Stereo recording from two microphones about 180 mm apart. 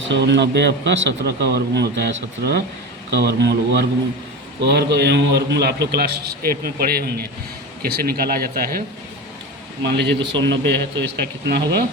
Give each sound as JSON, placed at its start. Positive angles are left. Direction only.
{"t": 0.0, "sound": "a man's voice", "side_deg": -80}
{"t": 9.8, "sound": "a man's voice", "side_deg": -70}